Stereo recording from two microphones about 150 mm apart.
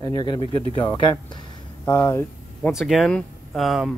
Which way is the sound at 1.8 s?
15° left (ahead or behind).